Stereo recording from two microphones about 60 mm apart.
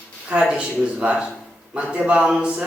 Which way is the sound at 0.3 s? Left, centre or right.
Centre.